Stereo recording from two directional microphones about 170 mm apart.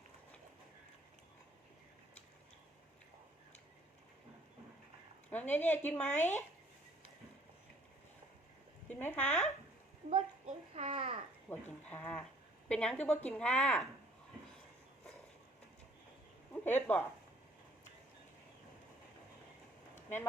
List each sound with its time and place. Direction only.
5.3 s a woman's voice: 10° left (ahead or behind)
6.1 s speech: 45° left (ahead or behind)
8.9 s speech: 10° left (ahead or behind)
10.1 s a sound: 35° right (ahead or behind)
11.4 s a woman's voice: 10° left (ahead or behind)
16.5 s speech: 10° left (ahead or behind)